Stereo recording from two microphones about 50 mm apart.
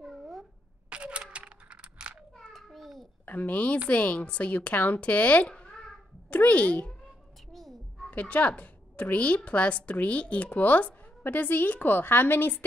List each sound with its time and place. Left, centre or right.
0.0 s a sound: centre
0.8 s a sound: right
2.5 s babbling: centre
3.3 s a woman's voice: left
4.7 s speech: left
5.0 s a woman's voice: left
5.5 s babbling: centre
6.3 s a woman's voice: left
7.5 s a sound: centre
8.1 s a woman's voice: left